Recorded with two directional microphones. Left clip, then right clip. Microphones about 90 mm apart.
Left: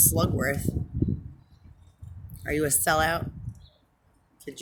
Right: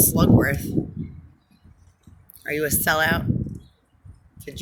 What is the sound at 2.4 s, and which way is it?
Speech, 45° left (ahead or behind).